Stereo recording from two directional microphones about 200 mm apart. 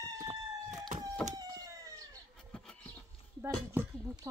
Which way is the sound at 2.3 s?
5° left (ahead or behind).